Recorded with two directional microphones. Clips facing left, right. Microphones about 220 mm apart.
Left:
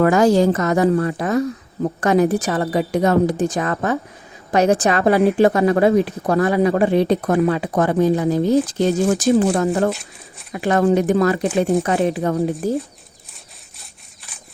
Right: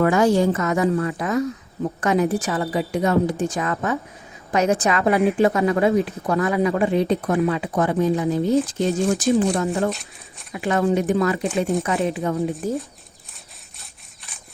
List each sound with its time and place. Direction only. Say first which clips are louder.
0.0 s a woman's voice: left 3 dB; 40° left (ahead or behind)
9.9 s speech: left 3 dB; centre (ahead or behind)
10.5 s a woman's voice: left 4 dB; 45° left (ahead or behind)